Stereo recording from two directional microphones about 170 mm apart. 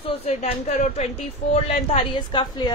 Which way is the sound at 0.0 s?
35° left (ahead or behind).